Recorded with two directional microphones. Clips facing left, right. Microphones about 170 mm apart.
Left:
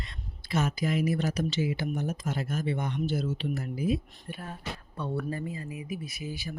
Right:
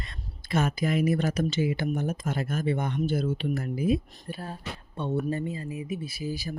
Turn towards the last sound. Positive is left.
turn(degrees=-40)  # may be behind; listen again after turning